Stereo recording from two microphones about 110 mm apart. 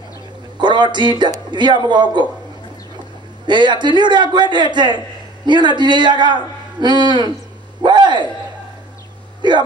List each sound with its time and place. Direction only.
0.6 s a man's voice: 45° right (ahead or behind)
3.4 s a man's voice: 45° right (ahead or behind)
7.8 s a sound: 45° right (ahead or behind)
9.4 s a man's voice: 45° right (ahead or behind)